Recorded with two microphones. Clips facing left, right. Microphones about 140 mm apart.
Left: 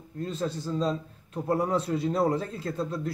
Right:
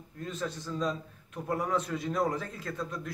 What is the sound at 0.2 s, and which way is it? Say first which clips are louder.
A man's voice: left 5 dB; 30° left (ahead or behind).